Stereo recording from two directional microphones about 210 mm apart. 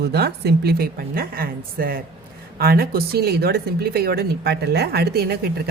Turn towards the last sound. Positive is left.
turn(degrees=-50)  # may be behind; listen again after turning